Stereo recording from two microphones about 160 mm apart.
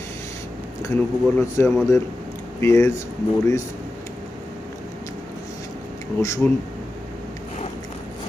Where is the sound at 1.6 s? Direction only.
15° left (ahead or behind).